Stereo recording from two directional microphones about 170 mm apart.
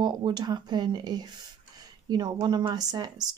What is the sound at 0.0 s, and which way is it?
Speech, 25° right (ahead or behind).